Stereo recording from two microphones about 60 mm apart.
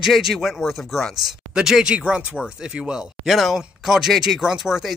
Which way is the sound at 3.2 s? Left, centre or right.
Centre.